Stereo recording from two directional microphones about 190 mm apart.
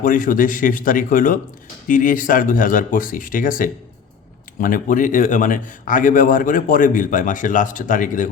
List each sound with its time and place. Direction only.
0.0 s a man's voice: 45° left (ahead or behind)